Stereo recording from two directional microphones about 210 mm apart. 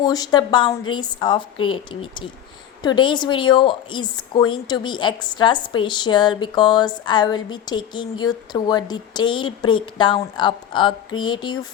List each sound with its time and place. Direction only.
0.0 s a woman's voice: 20° left (ahead or behind)